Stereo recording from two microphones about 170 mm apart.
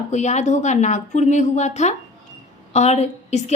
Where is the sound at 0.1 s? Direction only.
45° left (ahead or behind).